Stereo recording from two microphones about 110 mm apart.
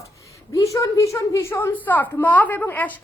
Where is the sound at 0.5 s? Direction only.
30° left (ahead or behind).